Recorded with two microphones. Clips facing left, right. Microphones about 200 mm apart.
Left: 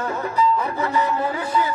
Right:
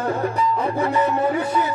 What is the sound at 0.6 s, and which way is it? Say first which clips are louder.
Music: right 2 dB; 25° right (ahead or behind).